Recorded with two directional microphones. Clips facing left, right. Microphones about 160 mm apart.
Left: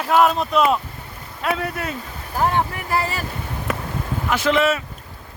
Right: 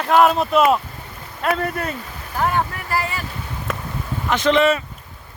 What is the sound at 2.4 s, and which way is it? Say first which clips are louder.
Speech: left 1 dB; 25° left (ahead or behind).